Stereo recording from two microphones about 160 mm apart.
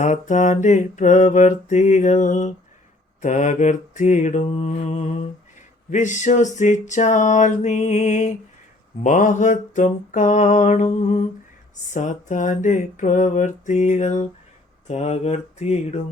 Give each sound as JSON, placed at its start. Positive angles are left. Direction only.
{"t": 0.0, "sound": "mantra", "side_deg": 50}